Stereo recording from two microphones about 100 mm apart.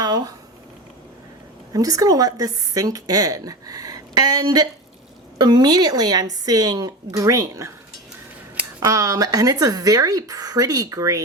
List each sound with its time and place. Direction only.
0.0 s a sound: 40° right (ahead or behind)
1.7 s a woman's voice: 35° right (ahead or behind)
8.8 s a woman's voice: 35° right (ahead or behind)